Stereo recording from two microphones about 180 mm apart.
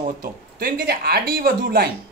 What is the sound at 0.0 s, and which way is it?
Speech, 50° right (ahead or behind).